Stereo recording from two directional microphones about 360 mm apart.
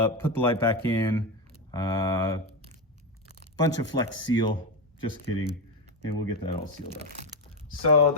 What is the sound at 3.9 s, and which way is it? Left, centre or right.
Speech, centre.